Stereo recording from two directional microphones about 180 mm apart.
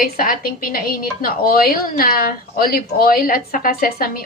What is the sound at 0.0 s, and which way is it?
A woman's voice, 55° left (ahead or behind).